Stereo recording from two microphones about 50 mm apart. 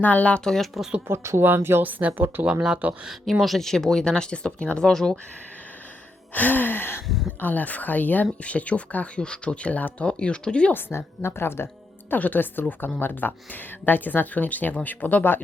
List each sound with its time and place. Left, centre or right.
0.0 s speech: left
0.4 s speech: centre
1.0 s speech: right
1.4 s speech: right
1.8 s speech: right
3.4 s speech: centre
6.3 s speech: left
7.3 s speech: left
10.8 s a woman's voice: left
12.1 s speech: left